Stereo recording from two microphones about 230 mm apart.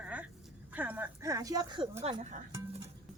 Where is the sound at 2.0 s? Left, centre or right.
Right.